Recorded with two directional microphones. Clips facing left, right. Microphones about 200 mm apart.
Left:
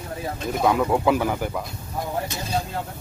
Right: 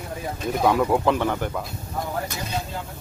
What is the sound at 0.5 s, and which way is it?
Speech, centre (ahead or behind).